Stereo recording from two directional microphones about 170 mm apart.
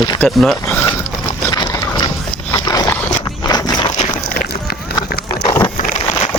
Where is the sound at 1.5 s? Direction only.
20° left (ahead or behind).